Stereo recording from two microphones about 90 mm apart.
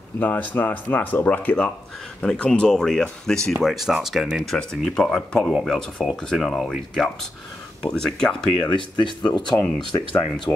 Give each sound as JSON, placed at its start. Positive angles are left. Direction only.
{"t": 0.2, "sound": "speech", "side_deg": 20}
{"t": 8.6, "sound": "speech", "side_deg": 60}